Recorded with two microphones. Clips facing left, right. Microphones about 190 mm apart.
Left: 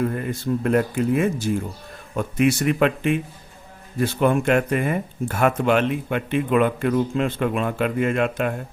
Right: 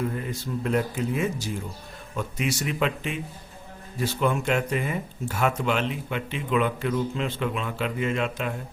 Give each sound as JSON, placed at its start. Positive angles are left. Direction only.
{"t": 0.0, "sound": "speech", "side_deg": 60}